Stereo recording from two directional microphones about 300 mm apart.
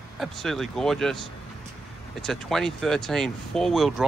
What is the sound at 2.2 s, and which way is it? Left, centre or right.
Speech, centre.